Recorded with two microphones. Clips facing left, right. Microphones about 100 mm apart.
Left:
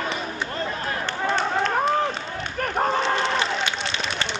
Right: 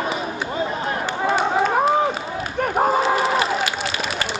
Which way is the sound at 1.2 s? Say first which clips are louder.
Right 4 dB; 10° right (ahead or behind).